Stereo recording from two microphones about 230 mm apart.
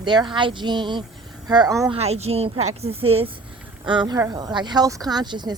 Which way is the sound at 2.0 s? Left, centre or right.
Right.